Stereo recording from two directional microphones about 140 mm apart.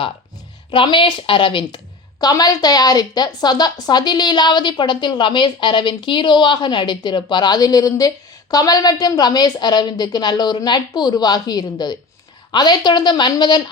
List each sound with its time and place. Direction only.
0.7 s a woman's voice: 35° left (ahead or behind)